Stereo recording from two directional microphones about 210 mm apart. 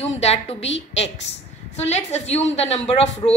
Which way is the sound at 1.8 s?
30° left (ahead or behind).